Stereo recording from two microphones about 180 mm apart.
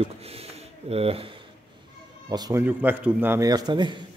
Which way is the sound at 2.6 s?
10° right (ahead or behind).